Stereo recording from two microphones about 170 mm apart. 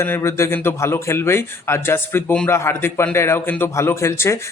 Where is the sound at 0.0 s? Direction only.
15° left (ahead or behind).